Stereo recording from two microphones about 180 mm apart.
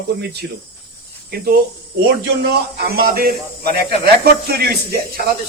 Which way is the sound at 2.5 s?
60° right (ahead or behind).